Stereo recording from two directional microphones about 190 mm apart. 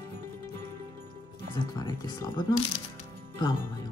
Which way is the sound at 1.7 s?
20° left (ahead or behind).